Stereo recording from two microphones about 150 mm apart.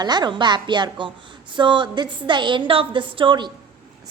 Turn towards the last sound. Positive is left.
turn(degrees=-30)  # may be behind; listen again after turning